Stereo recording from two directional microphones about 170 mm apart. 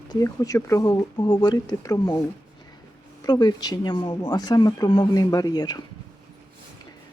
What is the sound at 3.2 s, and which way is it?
Speech, 25° left (ahead or behind).